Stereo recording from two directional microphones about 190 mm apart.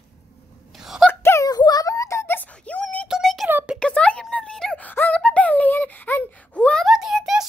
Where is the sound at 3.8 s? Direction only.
5° left (ahead or behind).